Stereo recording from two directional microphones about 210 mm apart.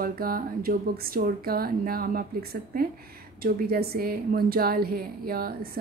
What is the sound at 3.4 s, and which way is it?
Speech, 45° right (ahead or behind).